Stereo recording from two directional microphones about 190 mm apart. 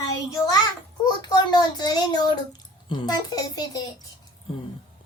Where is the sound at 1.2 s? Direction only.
20° left (ahead or behind).